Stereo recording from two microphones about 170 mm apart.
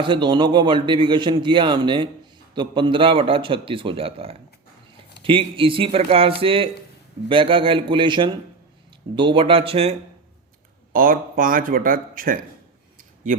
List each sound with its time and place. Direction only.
0.0 s a man's voice: 30° right (ahead or behind)
10.9 s speech: 55° right (ahead or behind)